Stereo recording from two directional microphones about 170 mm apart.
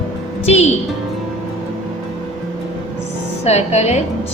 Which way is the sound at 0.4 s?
40° left (ahead or behind).